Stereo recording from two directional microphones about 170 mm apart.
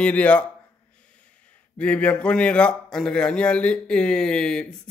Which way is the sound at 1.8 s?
10° left (ahead or behind).